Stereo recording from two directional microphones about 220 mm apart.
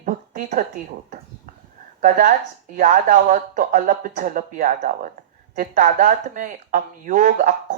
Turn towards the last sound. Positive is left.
turn(degrees=-35)  # may be behind; listen again after turning